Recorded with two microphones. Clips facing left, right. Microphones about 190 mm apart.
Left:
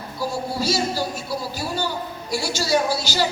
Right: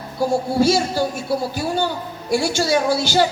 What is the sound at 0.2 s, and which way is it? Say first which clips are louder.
A woman's voice: right 8 dB; 55° right (ahead or behind).